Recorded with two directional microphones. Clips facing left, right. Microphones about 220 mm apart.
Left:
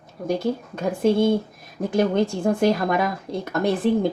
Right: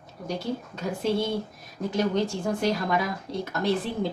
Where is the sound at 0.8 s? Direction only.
50° left (ahead or behind).